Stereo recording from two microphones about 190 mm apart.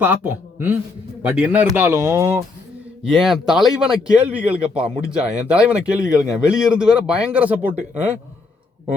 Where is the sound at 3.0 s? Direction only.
Centre (ahead or behind).